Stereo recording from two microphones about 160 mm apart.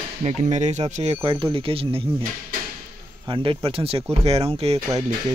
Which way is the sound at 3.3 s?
35° right (ahead or behind).